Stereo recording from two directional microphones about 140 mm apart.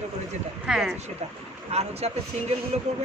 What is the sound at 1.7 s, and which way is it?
Speech, 50° right (ahead or behind).